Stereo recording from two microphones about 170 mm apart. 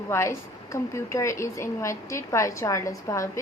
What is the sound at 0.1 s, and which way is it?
A woman's voice, 15° left (ahead or behind).